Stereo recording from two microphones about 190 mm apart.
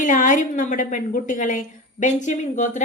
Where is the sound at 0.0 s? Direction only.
40° left (ahead or behind).